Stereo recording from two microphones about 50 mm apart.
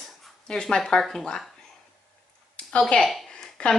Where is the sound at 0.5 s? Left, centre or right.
Centre.